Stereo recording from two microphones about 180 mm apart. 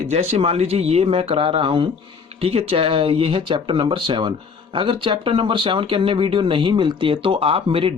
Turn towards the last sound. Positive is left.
turn(degrees=-30)  # may be behind; listen again after turning